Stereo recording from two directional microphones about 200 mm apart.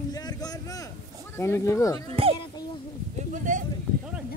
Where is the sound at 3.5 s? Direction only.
40° right (ahead or behind).